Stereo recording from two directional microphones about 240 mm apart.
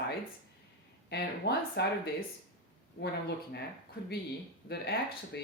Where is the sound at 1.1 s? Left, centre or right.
Left.